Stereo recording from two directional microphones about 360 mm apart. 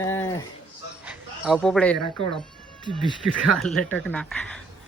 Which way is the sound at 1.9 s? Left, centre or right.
Right.